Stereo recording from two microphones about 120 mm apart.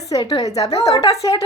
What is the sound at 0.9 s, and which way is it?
Speech, 30° left (ahead or behind).